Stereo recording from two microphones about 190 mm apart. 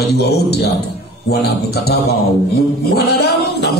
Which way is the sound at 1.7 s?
55° left (ahead or behind).